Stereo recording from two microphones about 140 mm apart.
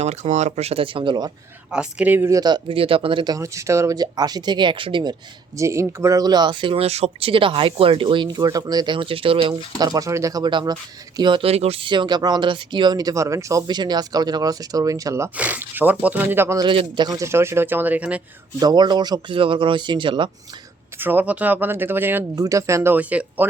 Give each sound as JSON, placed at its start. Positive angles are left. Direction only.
{"t": 0.0, "sound": "speech", "side_deg": -50}
{"t": 1.7, "sound": "speech", "side_deg": -5}
{"t": 2.4, "sound": "speech", "side_deg": -35}
{"t": 3.3, "sound": "speech", "side_deg": -20}
{"t": 5.5, "sound": "speech", "side_deg": -20}
{"t": 9.7, "sound": "speech", "side_deg": -30}
{"t": 15.4, "sound": "speech", "side_deg": -10}
{"t": 16.6, "sound": "speech", "side_deg": -35}
{"t": 18.6, "sound": "speech", "side_deg": -30}
{"t": 21.0, "sound": "speech", "side_deg": -15}